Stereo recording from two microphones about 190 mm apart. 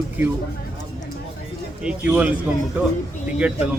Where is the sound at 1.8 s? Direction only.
5° right (ahead or behind).